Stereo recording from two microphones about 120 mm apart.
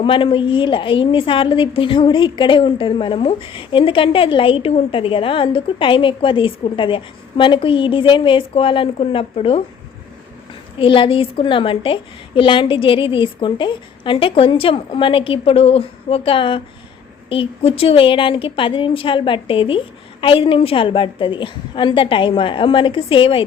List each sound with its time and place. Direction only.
0.0 s a woman's voice: 45° left (ahead or behind)
10.8 s a woman's voice: 45° left (ahead or behind)